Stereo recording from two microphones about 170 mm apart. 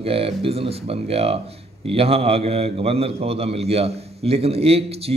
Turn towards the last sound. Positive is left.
turn(degrees=-35)  # may be behind; listen again after turning